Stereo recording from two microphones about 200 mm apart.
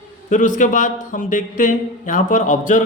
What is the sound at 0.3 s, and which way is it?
Speech, 40° left (ahead or behind).